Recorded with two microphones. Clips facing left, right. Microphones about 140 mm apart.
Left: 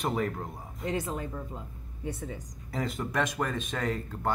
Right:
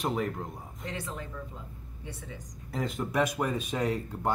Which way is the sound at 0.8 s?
45° left (ahead or behind).